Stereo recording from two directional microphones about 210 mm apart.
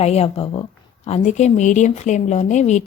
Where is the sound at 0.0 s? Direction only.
30° left (ahead or behind).